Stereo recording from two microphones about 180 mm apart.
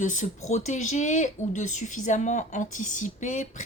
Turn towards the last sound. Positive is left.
turn(degrees=45)  # may be behind; listen again after turning